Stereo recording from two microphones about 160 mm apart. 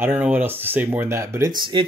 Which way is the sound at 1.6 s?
30° right (ahead or behind).